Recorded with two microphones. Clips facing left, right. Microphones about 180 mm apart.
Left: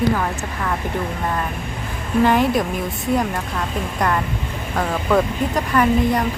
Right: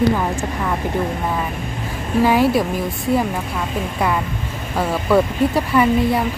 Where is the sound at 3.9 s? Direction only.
5° right (ahead or behind).